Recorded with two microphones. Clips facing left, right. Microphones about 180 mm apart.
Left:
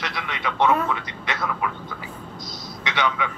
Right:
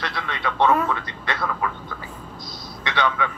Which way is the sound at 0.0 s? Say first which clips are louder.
Right 1 dB; 15° left (ahead or behind).